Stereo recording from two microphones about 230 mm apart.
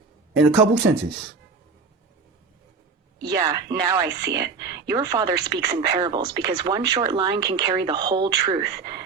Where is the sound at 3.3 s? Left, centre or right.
Centre.